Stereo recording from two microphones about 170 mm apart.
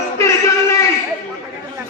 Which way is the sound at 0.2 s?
15° left (ahead or behind).